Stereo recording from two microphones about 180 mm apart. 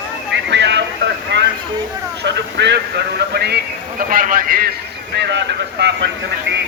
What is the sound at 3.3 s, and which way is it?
Speech, 60° right (ahead or behind).